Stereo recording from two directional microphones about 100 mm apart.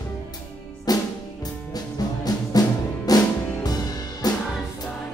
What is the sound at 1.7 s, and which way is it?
Music, 40° left (ahead or behind).